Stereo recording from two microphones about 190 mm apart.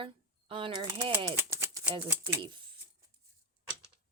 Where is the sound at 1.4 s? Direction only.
15° right (ahead or behind).